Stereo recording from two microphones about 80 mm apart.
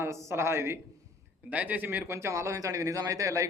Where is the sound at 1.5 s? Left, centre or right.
Right.